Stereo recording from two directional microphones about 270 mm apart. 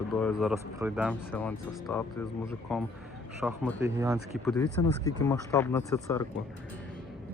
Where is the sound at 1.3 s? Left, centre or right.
Centre.